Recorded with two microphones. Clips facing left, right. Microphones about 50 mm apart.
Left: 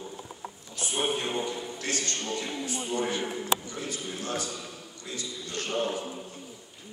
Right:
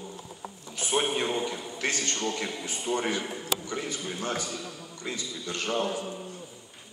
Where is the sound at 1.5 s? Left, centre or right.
Right.